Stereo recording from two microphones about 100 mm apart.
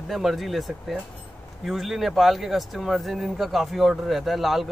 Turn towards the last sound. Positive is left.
turn(degrees=0)  # may be behind; listen again after turning